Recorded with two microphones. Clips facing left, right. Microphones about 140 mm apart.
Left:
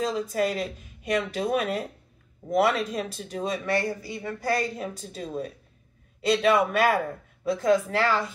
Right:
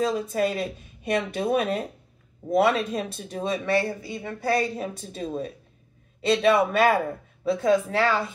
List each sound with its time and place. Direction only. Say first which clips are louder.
0.0 s speech: right 2 dB; 25° right (ahead or behind)